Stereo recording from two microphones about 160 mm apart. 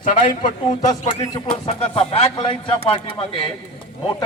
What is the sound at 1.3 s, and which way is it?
Speech, 35° left (ahead or behind).